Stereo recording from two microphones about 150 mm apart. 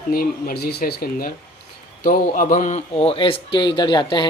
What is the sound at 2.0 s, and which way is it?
Speech, 65° left (ahead or behind).